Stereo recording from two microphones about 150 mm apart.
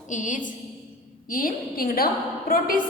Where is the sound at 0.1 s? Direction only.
60° left (ahead or behind).